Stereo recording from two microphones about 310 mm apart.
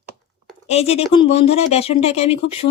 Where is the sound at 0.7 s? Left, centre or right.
Centre.